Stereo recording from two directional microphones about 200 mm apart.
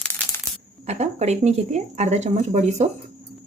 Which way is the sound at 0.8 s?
35° right (ahead or behind).